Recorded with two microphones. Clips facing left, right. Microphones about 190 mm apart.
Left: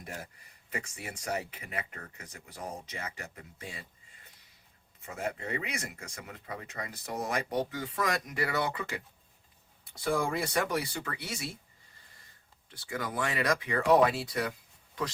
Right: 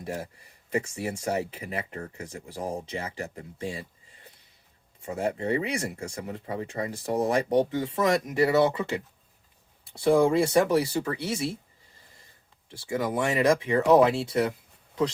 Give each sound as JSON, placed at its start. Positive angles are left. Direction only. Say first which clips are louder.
{"t": 0.0, "sound": "speech", "louder": "right 9 dB", "side_deg": -30}
{"t": 10.0, "sound": "speech", "louder": "right 10 dB", "side_deg": -25}
{"t": 12.7, "sound": "speech", "louder": "right 8 dB", "side_deg": -25}